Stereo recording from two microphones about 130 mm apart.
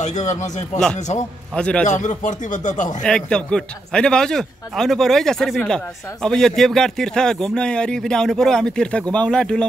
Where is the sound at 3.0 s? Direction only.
5° left (ahead or behind).